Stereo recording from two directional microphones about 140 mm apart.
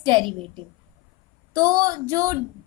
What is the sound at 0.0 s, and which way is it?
A woman's voice, 35° right (ahead or behind).